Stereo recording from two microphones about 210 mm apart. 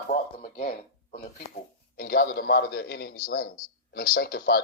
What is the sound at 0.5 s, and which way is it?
A man's voice, 45° left (ahead or behind).